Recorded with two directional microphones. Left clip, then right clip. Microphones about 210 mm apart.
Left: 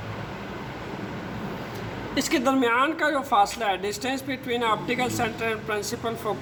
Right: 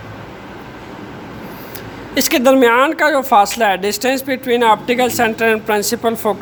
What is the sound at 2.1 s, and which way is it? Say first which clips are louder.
Speech: right 12 dB; 50° right (ahead or behind).